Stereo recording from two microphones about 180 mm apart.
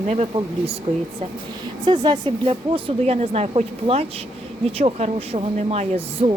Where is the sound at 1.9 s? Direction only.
25° right (ahead or behind).